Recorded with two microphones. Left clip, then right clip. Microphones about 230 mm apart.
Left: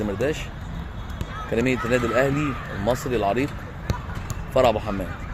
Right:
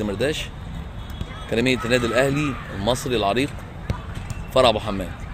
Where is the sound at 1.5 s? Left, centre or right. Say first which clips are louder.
Right 2 dB; right.